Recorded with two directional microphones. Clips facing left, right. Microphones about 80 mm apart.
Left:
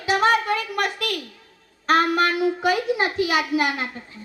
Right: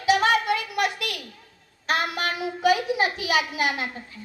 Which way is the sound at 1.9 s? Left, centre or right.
Left.